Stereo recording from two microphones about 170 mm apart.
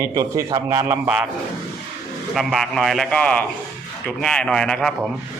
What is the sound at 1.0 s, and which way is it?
Speech, 5° right (ahead or behind).